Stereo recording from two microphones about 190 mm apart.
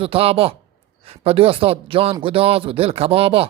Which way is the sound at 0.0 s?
30° right (ahead or behind).